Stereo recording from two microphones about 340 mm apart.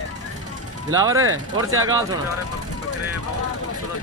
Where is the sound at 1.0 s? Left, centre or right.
Centre.